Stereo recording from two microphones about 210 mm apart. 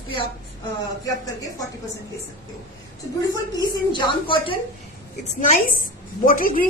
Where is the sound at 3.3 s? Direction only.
20° left (ahead or behind).